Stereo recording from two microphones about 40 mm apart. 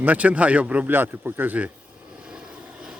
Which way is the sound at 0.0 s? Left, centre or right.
Right.